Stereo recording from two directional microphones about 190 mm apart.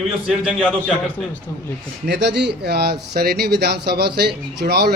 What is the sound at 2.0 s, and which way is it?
Speech, 65° right (ahead or behind).